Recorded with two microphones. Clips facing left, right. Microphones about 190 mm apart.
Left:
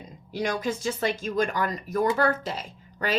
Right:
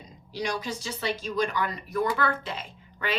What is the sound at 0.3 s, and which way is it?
A woman's voice, 50° left (ahead or behind).